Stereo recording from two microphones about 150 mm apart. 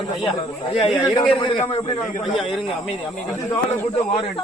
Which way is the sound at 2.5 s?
Centre (ahead or behind).